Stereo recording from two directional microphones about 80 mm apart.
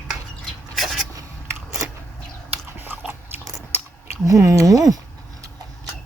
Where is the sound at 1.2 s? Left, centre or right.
Right.